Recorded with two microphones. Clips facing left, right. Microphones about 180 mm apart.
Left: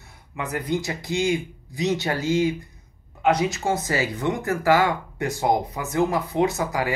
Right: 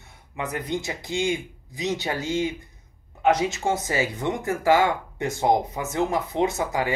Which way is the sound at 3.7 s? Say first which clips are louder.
Left 1 dB; 20° right (ahead or behind).